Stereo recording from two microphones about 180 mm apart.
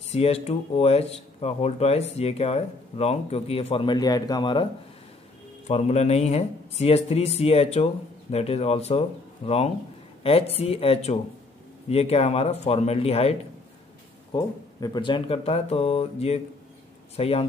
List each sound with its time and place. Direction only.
0.1 s speech: 35° left (ahead or behind)
5.7 s speech: 35° left (ahead or behind)
10.2 s speech: 35° left (ahead or behind)
14.3 s speech: 25° left (ahead or behind)